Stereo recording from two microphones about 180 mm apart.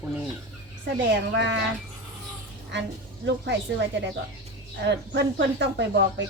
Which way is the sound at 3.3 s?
75° right (ahead or behind).